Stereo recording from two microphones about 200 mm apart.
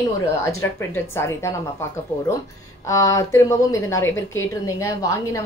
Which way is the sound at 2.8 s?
15° left (ahead or behind).